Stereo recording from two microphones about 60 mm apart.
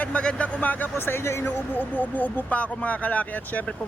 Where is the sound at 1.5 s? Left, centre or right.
Left.